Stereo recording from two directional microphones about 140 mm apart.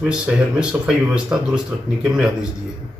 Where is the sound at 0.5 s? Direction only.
5° right (ahead or behind).